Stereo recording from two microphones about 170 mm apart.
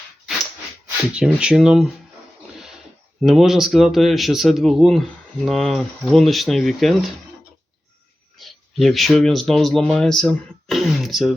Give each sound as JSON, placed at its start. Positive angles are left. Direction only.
{"t": 1.1, "sound": "speech", "side_deg": -5}
{"t": 3.2, "sound": "speech", "side_deg": 0}
{"t": 8.4, "sound": "speech", "side_deg": 0}